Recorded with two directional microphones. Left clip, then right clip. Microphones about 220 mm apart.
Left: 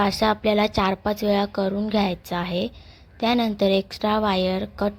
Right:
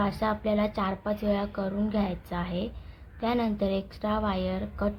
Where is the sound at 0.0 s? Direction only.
35° left (ahead or behind).